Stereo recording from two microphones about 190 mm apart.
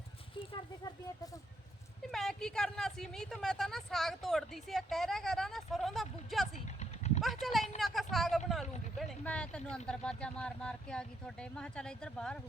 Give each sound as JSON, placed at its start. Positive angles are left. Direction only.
{"t": 2.1, "sound": "speech", "side_deg": 0}
{"t": 6.7, "sound": "a sound", "side_deg": 40}
{"t": 7.4, "sound": "speech", "side_deg": 0}